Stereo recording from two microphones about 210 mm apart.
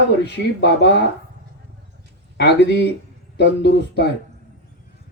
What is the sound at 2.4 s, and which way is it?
A man's voice, 55° left (ahead or behind).